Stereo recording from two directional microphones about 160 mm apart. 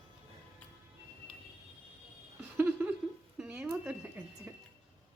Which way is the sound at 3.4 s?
10° right (ahead or behind).